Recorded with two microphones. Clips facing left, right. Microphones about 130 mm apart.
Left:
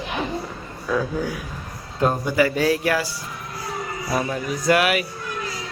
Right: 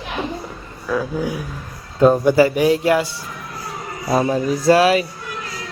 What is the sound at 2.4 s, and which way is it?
Speech, 20° right (ahead or behind).